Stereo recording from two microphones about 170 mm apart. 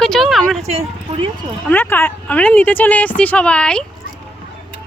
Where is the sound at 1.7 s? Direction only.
10° left (ahead or behind).